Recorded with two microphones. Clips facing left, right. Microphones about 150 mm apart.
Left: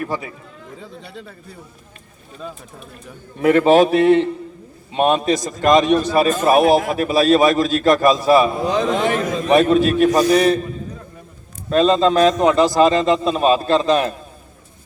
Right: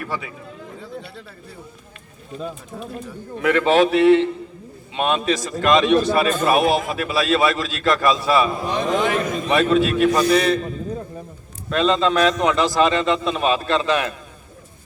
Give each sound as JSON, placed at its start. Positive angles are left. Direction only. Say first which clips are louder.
{"t": 0.0, "sound": "a man's voice", "louder": "left 4 dB", "side_deg": 35}
{"t": 3.4, "sound": "a man's voice", "louder": "left 4 dB", "side_deg": 40}
{"t": 11.7, "sound": "a man's voice", "louder": "left 4 dB", "side_deg": 35}